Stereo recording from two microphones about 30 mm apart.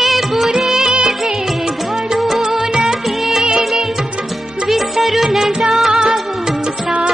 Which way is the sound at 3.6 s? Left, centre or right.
Centre.